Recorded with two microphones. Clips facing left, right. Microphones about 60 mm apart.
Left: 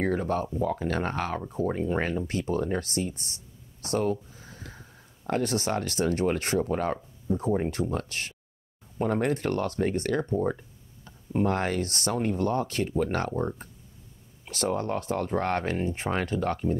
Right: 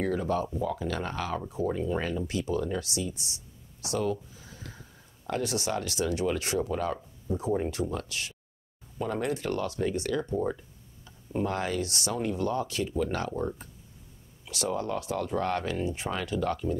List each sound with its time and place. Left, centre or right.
0.0 s speech: left
14.4 s speech: left